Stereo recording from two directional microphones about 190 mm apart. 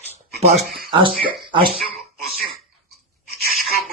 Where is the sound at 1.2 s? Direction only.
25° right (ahead or behind).